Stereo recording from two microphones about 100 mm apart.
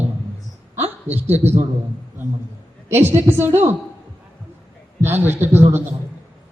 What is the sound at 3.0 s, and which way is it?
Speech, 20° right (ahead or behind).